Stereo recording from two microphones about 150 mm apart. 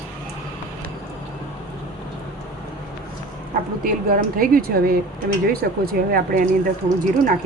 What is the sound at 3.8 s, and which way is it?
Speech, 75° right (ahead or behind).